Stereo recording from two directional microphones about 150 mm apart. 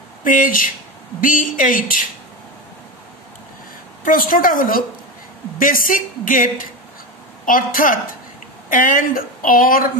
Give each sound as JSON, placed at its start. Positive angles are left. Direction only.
{"t": 0.2, "sound": "a woman's voice", "side_deg": 65}
{"t": 4.0, "sound": "a woman's voice", "side_deg": 70}